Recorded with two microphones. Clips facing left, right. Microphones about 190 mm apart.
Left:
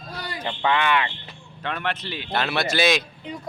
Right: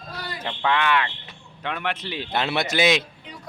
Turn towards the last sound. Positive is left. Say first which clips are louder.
# even
turn(degrees=-20)  # may be behind; listen again after turning